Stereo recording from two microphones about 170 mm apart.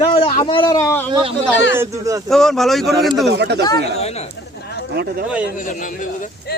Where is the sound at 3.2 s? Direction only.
85° right.